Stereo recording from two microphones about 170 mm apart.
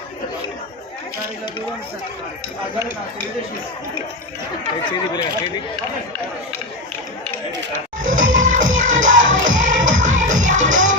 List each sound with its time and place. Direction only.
4.9 s speech: 25° left (ahead or behind)
8.0 s music: 50° right (ahead or behind)
9.1 s music: 90° right
9.5 s music: 50° right (ahead or behind)